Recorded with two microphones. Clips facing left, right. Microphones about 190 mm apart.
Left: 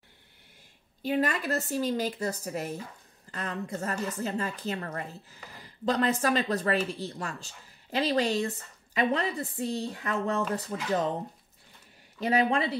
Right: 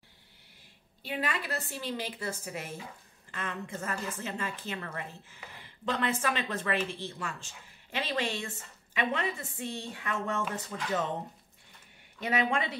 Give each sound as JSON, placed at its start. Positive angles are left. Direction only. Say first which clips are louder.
{"t": 1.0, "sound": "a woman's voice", "louder": "left 7 dB", "side_deg": 45}
{"t": 12.2, "sound": "a woman's voice", "louder": "left 4 dB", "side_deg": 35}